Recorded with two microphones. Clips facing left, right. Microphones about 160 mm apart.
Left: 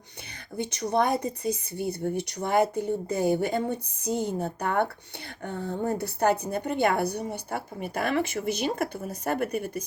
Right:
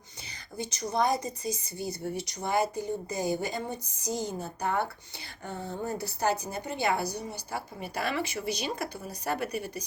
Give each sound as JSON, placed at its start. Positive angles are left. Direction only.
{"t": 0.5, "sound": "a woman's voice", "side_deg": 60}